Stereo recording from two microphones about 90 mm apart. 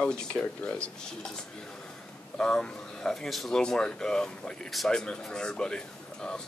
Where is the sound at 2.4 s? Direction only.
10° left (ahead or behind).